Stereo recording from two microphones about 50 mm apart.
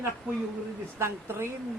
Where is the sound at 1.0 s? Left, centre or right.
Right.